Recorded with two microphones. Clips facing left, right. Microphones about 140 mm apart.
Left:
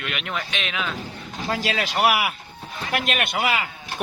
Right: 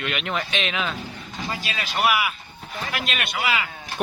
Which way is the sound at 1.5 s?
90° left.